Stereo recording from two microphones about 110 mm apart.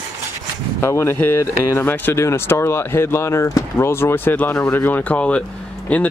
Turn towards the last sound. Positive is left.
turn(degrees=10)  # may be behind; listen again after turning